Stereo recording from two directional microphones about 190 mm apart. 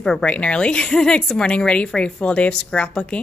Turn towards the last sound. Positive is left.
turn(degrees=5)  # may be behind; listen again after turning